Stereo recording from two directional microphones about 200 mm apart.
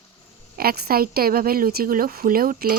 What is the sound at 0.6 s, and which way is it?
Speech, 50° right (ahead or behind).